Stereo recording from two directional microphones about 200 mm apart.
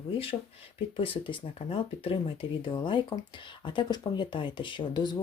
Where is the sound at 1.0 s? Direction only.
25° left (ahead or behind).